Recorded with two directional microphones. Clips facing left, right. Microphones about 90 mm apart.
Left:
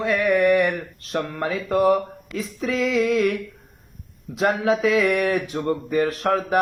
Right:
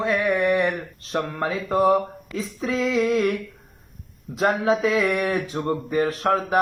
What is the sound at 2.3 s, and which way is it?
Speech, 30° right (ahead or behind).